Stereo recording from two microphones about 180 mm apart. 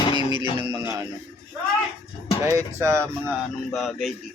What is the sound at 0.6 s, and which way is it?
Speech, 20° right (ahead or behind).